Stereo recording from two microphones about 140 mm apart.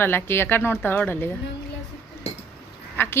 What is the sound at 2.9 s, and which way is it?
Duck, 15° left (ahead or behind).